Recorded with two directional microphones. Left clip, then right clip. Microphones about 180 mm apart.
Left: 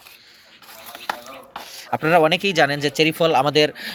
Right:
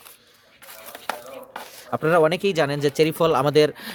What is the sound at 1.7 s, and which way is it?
Speech, 20° right (ahead or behind).